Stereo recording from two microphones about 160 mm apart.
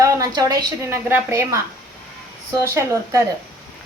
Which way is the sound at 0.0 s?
20° right (ahead or behind).